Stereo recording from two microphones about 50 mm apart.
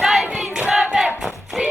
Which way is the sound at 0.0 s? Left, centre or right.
Centre.